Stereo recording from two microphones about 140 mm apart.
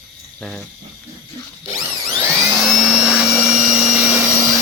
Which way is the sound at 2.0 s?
25° right (ahead or behind).